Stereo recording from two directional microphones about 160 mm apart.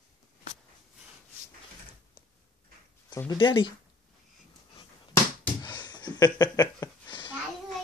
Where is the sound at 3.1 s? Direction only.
25° left (ahead or behind).